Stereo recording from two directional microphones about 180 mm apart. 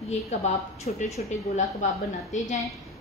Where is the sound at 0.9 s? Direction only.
45° left (ahead or behind).